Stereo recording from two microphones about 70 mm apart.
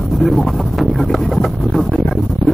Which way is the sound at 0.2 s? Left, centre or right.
Centre.